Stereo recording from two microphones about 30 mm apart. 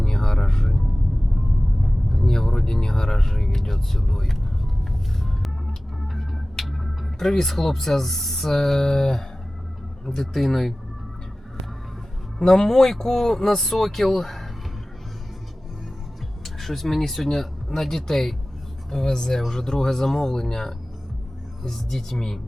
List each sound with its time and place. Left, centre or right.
0.0 s music: centre
2.1 s speech: centre
6.1 s music: centre
7.2 s speech: centre
12.4 s speech: centre
16.4 s music: centre
17.0 s speech: centre